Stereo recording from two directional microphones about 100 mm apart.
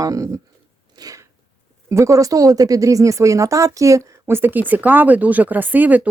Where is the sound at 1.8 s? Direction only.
30° right (ahead or behind).